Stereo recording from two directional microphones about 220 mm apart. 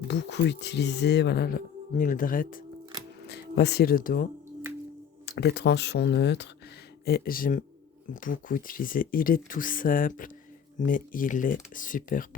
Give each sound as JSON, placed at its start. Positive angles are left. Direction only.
{"t": 0.1, "sound": "speech", "side_deg": 50}